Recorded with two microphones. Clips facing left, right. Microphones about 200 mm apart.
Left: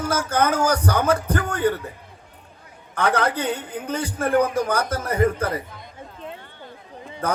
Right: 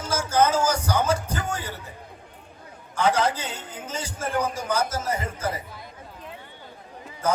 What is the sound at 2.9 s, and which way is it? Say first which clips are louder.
A man's voice: left 1 dB; 60° left (ahead or behind).